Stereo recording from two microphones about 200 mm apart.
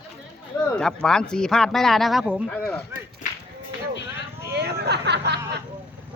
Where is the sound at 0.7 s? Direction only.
5° left (ahead or behind).